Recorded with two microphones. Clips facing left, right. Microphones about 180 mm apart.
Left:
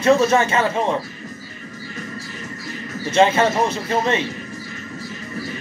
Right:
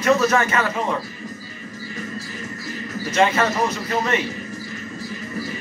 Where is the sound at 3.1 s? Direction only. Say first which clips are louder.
Left 3 dB; 25° left (ahead or behind).